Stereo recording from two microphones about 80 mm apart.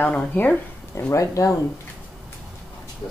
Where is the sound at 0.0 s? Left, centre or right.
Centre.